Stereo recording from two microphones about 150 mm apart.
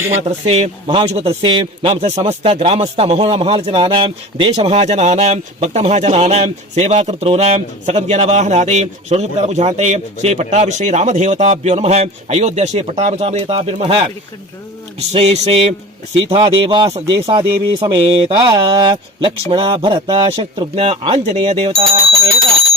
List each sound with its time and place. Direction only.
0.2 s a man's voice: 45° right (ahead or behind)